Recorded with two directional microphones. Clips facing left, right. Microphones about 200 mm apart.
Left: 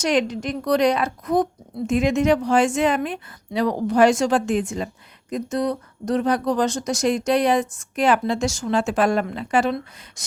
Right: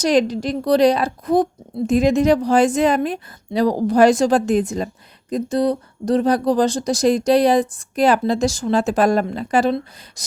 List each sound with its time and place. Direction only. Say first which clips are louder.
0.0 s speech: right 4 dB; 35° right (ahead or behind)